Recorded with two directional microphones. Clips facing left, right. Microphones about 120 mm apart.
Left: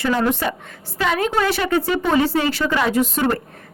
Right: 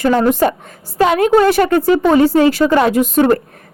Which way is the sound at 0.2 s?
40° right (ahead or behind).